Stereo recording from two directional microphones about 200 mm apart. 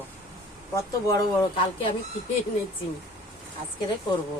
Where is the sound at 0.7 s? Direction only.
15° left (ahead or behind).